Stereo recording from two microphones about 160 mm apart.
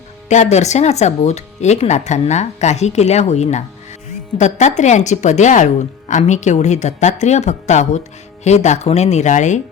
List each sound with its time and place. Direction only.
0.3 s speech: 45° left (ahead or behind)